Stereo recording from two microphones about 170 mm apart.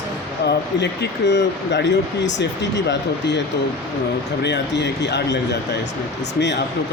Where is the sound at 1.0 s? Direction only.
90° left.